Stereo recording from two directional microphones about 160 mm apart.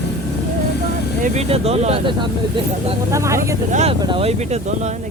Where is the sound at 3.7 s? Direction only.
45° right (ahead or behind).